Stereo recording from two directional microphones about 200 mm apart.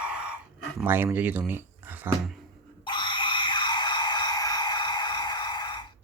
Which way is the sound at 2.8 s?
25° left (ahead or behind).